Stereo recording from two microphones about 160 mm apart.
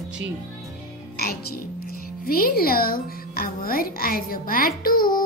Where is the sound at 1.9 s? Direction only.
65° left (ahead or behind).